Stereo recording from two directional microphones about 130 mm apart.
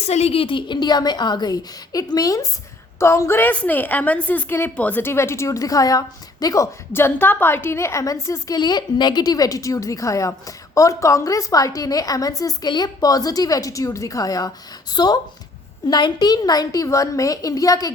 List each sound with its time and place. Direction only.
0.0 s a woman's voice: 55° left (ahead or behind); by 17.9 s 25° left (ahead or behind)